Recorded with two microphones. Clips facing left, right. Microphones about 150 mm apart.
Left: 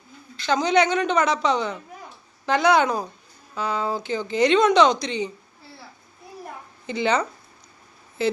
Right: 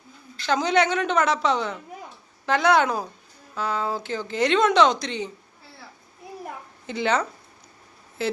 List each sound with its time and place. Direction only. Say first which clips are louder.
0.4 s speech: left 1 dB; 5° right (ahead or behind)
6.8 s speech: left 1 dB; centre (ahead or behind)